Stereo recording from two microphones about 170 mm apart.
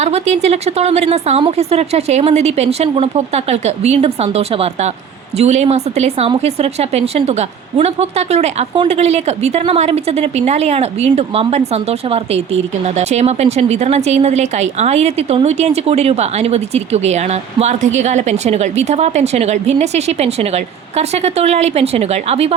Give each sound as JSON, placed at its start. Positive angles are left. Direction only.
{"t": 0.0, "sound": "a woman's voice", "side_deg": -40}